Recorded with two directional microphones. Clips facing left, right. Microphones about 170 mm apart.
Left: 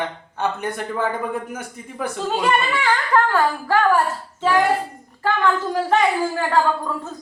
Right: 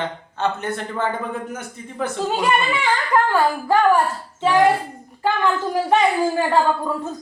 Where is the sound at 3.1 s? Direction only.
15° right (ahead or behind).